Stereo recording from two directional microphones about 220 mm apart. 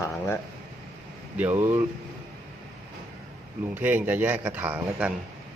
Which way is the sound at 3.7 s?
10° right (ahead or behind).